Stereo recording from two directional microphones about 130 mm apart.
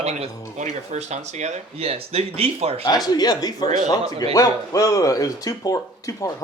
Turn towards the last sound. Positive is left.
turn(degrees=25)  # may be behind; listen again after turning